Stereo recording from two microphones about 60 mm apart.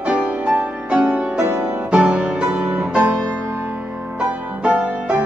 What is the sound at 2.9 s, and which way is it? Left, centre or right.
Music, right.